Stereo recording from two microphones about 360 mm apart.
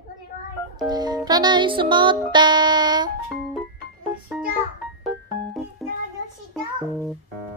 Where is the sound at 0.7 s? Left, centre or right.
Centre.